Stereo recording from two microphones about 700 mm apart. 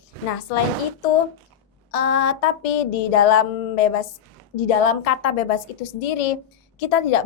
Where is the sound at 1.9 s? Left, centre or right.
Left.